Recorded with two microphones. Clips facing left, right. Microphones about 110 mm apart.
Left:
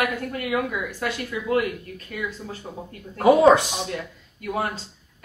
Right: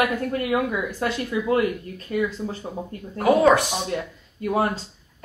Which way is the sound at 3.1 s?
20° left (ahead or behind).